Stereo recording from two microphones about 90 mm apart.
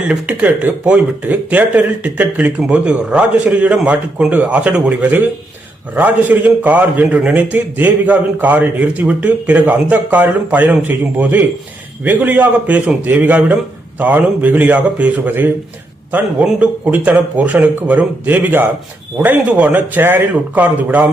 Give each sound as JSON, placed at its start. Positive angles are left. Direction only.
{"t": 0.1, "sound": "a man's voice", "side_deg": -15}